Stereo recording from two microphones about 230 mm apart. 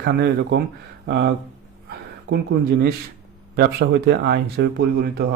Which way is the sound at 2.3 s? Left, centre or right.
Right.